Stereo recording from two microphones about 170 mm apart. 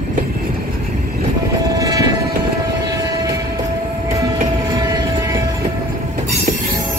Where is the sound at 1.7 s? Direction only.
20° right (ahead or behind).